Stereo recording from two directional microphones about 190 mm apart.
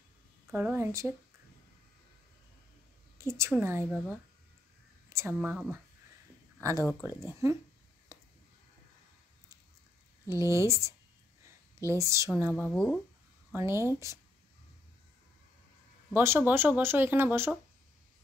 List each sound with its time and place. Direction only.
0.5 s speech: 10° right (ahead or behind)
3.2 s speech: 15° right (ahead or behind)
5.1 s speech: 10° right (ahead or behind)
6.8 s speech: 15° left (ahead or behind)
7.2 s speech: 15° right (ahead or behind)
10.4 s speech: 15° right (ahead or behind)
11.4 s a sound: 15° right (ahead or behind)
12.5 s speech: 5° left (ahead or behind)
13.5 s speech: 15° right (ahead or behind)
16.1 s speech: 10° right (ahead or behind)